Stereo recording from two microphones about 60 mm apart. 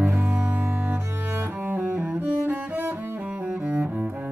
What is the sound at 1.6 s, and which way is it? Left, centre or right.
Cello, right.